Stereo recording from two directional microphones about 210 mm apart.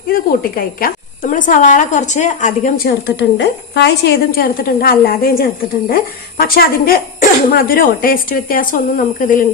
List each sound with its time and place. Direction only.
0.1 s a woman's voice: 45° left (ahead or behind)